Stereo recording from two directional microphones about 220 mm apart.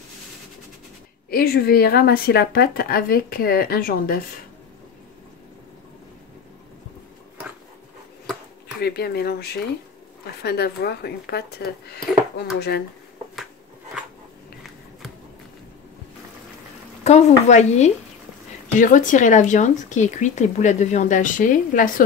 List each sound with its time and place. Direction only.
1.3 s speech: 45° left (ahead or behind)
8.8 s speech: 45° left (ahead or behind)
17.0 s speech: 30° left (ahead or behind)